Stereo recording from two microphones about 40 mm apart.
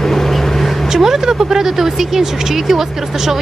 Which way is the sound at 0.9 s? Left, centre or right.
Centre.